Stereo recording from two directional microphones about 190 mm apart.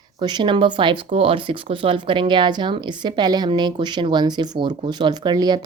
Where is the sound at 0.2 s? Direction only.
25° right (ahead or behind).